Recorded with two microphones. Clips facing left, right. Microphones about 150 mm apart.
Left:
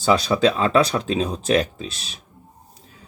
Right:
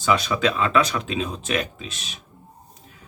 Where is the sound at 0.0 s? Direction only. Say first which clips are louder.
Left 4 dB; 35° left (ahead or behind).